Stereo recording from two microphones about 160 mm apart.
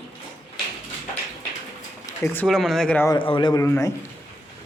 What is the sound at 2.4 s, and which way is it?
Speech, centre (ahead or behind).